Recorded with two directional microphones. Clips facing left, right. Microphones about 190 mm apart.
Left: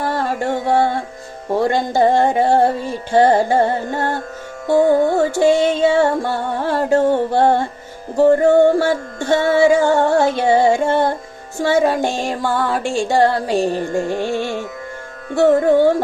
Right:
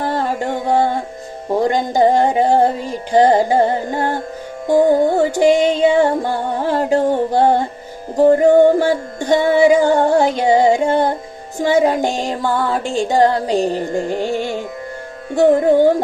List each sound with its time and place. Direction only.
0.3 s music: 15° right (ahead or behind)
14.1 s carnatic music: 15° right (ahead or behind)
15.4 s music: 15° right (ahead or behind)